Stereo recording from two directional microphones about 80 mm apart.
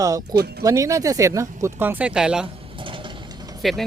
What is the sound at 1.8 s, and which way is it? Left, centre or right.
Speech, right.